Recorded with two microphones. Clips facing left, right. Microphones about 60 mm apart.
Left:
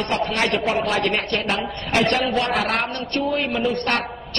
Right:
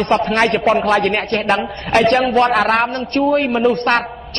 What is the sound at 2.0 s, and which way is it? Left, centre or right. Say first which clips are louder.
Speech: right 7 dB; right.